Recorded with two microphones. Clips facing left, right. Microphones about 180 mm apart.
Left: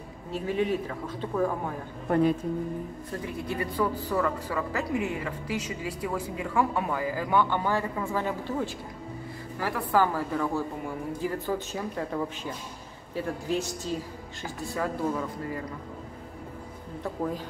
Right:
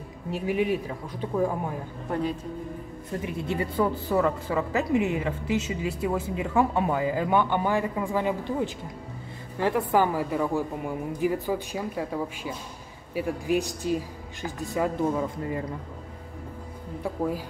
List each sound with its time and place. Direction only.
0.3 s speech: 15° right (ahead or behind)
3.2 s a woman's voice: 20° right (ahead or behind)
17.0 s speech: 10° right (ahead or behind)